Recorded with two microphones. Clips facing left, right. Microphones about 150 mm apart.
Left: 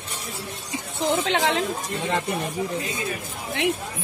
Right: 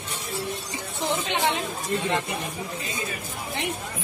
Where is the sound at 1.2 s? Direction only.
90° left.